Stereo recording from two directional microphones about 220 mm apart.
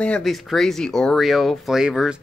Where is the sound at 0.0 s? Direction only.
5° left (ahead or behind).